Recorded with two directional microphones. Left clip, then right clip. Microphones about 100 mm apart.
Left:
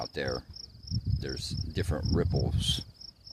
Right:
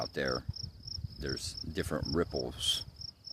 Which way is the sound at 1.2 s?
5° right (ahead or behind).